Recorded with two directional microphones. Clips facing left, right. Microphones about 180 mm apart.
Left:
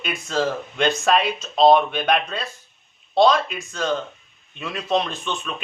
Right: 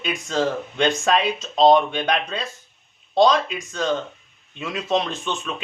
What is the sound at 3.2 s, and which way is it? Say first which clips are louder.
A woman's voice: even; 20° right (ahead or behind).